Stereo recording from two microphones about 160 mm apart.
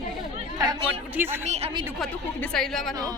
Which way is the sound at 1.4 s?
45° right (ahead or behind).